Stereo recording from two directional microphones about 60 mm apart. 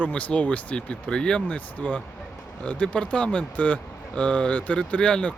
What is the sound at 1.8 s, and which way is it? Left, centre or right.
Speech, left.